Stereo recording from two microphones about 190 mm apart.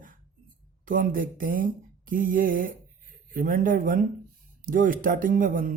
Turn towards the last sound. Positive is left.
turn(degrees=-45)  # may be behind; listen again after turning